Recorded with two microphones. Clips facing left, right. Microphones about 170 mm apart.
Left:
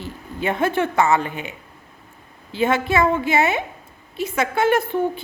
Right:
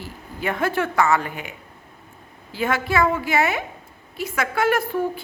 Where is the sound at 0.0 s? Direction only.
20° left (ahead or behind).